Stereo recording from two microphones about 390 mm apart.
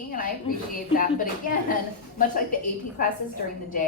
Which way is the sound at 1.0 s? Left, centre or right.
Left.